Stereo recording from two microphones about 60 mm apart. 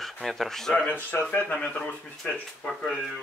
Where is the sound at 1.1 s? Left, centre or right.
Left.